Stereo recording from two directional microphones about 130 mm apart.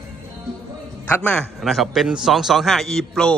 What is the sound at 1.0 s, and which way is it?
A man's voice, 15° left (ahead or behind).